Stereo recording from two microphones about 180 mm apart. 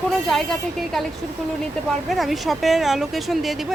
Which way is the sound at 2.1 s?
Centre (ahead or behind).